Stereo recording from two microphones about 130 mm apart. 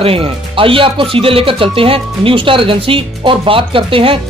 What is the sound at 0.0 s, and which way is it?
Speech, 45° right (ahead or behind).